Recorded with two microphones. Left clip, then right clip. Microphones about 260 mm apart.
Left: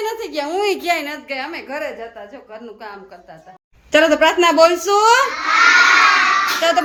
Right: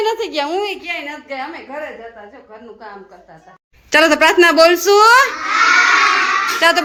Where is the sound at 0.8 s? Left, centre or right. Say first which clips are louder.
Left 5 dB; centre.